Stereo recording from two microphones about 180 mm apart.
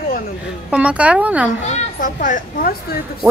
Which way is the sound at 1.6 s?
50° left (ahead or behind).